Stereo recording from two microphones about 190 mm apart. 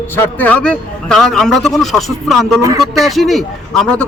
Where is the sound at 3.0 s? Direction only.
Centre (ahead or behind).